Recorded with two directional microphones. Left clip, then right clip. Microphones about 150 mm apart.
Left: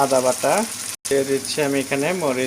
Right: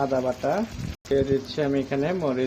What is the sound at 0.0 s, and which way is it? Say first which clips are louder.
Speech: left 7 dB; 40° left (ahead or behind).